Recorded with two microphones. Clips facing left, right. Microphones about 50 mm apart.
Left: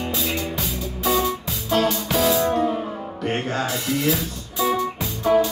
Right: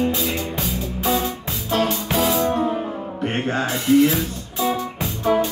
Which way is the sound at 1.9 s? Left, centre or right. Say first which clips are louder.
Even; right.